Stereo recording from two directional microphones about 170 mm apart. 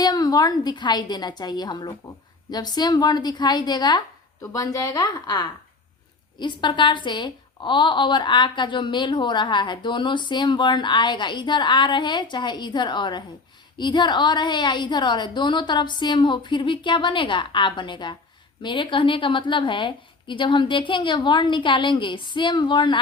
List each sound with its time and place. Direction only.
0.0 s a woman's voice: 25° left (ahead or behind)